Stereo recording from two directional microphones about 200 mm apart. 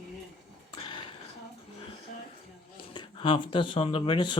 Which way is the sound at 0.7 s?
25° left (ahead or behind).